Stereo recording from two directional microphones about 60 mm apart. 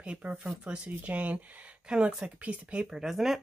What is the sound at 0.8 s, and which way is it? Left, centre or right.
Speech, right.